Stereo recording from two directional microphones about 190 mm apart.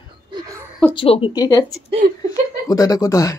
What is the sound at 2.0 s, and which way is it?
Speech, 55° right (ahead or behind).